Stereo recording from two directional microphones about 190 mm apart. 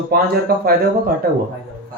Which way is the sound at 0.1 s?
50° right (ahead or behind).